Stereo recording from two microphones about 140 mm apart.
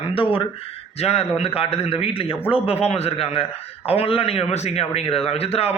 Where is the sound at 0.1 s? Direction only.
40° left (ahead or behind).